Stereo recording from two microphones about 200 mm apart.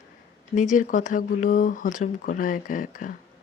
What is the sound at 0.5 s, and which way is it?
Speech, 40° left (ahead or behind).